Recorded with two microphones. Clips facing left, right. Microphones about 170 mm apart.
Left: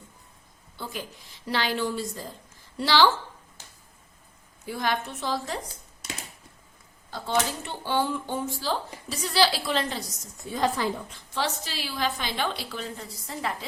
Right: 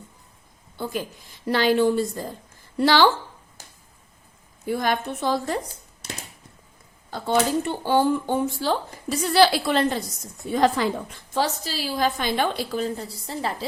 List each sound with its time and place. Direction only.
1.5 s speech: 50° right (ahead or behind)
4.6 s a woman's voice: 50° right (ahead or behind)
7.1 s speech: 50° right (ahead or behind)
10.5 s speech: 75° right (ahead or behind)
11.3 s a woman's voice: 40° right (ahead or behind)